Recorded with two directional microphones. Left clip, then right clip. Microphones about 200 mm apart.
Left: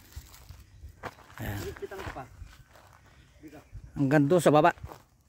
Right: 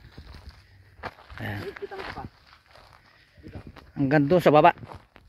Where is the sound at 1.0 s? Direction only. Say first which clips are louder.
Right 4 dB; 50° right (ahead or behind).